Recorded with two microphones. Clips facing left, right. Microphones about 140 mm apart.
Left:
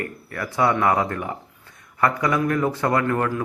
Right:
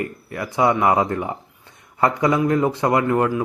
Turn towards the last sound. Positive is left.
turn(degrees=-20)  # may be behind; listen again after turning